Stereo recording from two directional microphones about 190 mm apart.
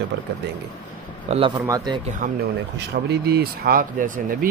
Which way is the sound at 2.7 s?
60° right (ahead or behind).